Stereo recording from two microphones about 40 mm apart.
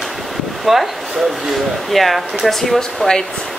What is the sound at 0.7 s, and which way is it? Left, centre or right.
Speech, centre.